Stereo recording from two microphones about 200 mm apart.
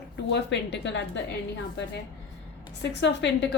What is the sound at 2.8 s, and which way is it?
Speech, 60° left (ahead or behind).